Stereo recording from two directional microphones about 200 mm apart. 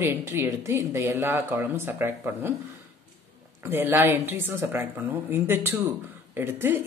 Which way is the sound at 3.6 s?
10° right (ahead or behind).